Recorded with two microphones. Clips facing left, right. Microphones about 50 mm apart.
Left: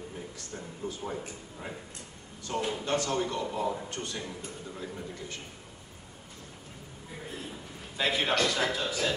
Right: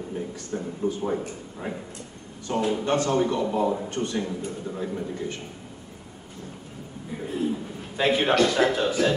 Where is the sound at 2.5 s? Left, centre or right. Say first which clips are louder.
Right 6 dB; right.